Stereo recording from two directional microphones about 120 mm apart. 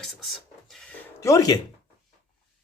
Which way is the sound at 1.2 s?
25° left (ahead or behind).